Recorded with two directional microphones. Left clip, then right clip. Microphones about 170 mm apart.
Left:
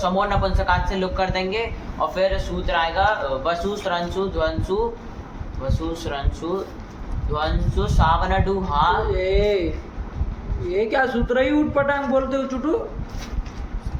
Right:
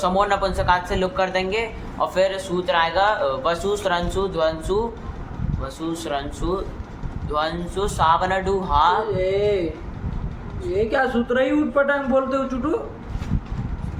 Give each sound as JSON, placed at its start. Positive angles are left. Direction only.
{"t": 0.0, "sound": "speech", "side_deg": -45}
{"t": 2.0, "sound": "a man's voice", "side_deg": -40}
{"t": 5.9, "sound": "speech", "side_deg": -30}
{"t": 7.3, "sound": "a man's voice", "side_deg": -45}
{"t": 9.1, "sound": "speech", "side_deg": 5}
{"t": 10.8, "sound": "a man's voice", "side_deg": 10}